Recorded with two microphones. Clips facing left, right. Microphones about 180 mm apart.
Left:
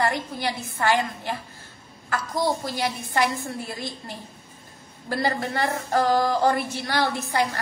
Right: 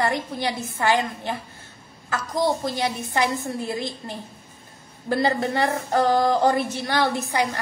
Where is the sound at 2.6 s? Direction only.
20° right (ahead or behind).